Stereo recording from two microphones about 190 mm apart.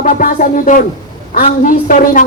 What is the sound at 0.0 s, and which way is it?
A man's voice, 45° left (ahead or behind).